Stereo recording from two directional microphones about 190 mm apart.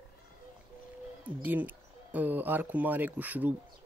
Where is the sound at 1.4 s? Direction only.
10° right (ahead or behind).